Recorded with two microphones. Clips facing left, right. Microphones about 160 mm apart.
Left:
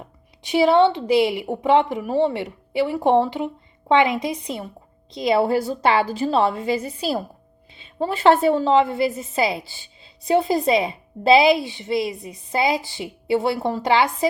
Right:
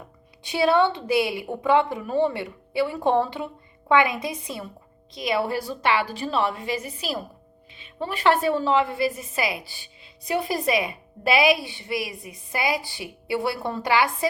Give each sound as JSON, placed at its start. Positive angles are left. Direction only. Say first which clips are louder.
{"t": 0.4, "sound": "a woman's voice", "louder": "left 4 dB", "side_deg": 20}